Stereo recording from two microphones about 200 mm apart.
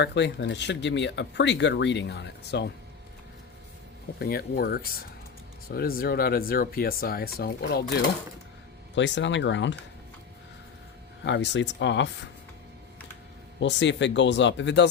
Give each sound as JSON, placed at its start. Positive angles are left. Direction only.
{"t": 0.0, "sound": "speech", "side_deg": 60}
{"t": 4.2, "sound": "speech", "side_deg": 50}
{"t": 9.0, "sound": "speech", "side_deg": 65}
{"t": 11.2, "sound": "speech", "side_deg": 60}
{"t": 13.6, "sound": "speech", "side_deg": 60}